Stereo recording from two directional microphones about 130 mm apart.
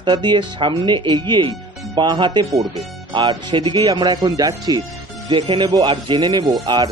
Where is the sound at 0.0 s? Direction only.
35° right (ahead or behind).